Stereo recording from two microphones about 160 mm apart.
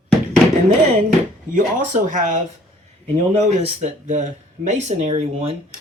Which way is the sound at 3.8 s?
45° right (ahead or behind).